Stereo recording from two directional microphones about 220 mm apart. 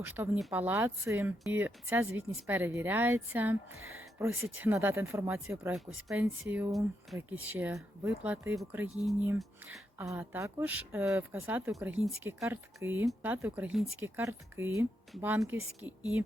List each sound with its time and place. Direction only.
0.0 s speech: 10° right (ahead or behind)
3.8 s speech: 70° right (ahead or behind)
4.2 s speech: 10° right (ahead or behind)